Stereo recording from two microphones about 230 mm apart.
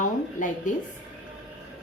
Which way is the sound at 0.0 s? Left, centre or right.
Left.